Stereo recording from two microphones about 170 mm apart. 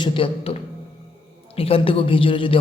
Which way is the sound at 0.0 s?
30° left (ahead or behind).